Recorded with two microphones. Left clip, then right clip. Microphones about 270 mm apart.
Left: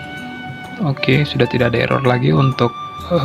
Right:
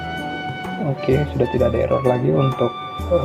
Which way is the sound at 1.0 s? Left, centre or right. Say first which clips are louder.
Left 4 dB; left.